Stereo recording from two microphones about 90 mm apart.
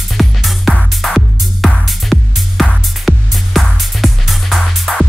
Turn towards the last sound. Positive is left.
turn(degrees=5)  # may be behind; listen again after turning